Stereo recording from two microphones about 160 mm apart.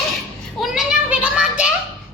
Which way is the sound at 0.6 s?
Centre (ahead or behind).